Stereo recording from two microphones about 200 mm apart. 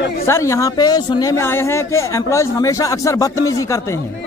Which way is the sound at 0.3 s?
15° left (ahead or behind).